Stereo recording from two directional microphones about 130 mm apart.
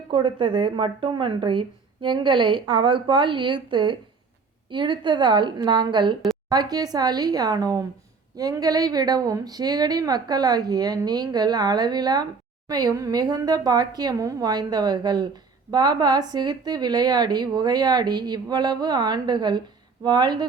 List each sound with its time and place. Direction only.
0.1 s a woman's voice: 40° right (ahead or behind)